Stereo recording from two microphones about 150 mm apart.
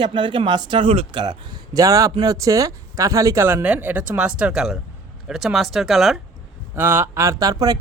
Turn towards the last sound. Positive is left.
turn(degrees=-25)  # may be behind; listen again after turning